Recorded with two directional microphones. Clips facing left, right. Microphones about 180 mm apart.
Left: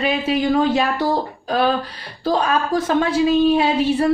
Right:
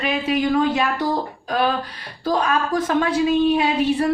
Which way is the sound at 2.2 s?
30° left (ahead or behind).